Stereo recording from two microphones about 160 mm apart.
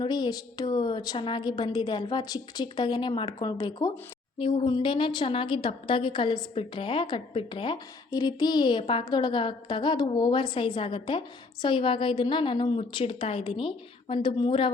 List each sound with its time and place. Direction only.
0.0 s a woman's voice: 25° left (ahead or behind)